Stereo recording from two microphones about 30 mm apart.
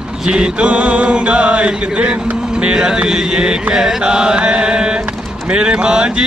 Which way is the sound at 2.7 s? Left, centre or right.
Right.